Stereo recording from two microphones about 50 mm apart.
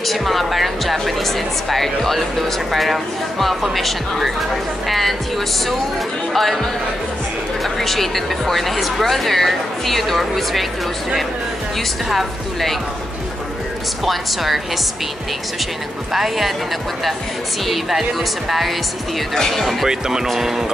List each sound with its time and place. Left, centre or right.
0.0 s speech: centre
6.3 s speech: centre
12.1 s speech: centre
14.0 s speech: centre
16.1 s speech: centre
17.6 s speech: centre
19.3 s speech: centre
19.9 s speech: centre